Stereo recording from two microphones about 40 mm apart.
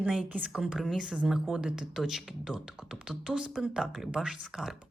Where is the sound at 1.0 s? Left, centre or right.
Right.